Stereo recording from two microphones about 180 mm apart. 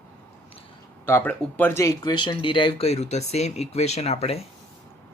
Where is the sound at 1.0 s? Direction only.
10° left (ahead or behind); by 4.4 s 35° left (ahead or behind).